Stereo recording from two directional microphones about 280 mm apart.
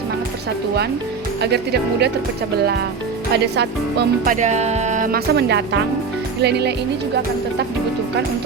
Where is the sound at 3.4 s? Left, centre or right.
Right.